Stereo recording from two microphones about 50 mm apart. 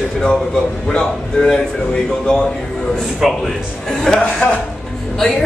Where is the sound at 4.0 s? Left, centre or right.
Centre.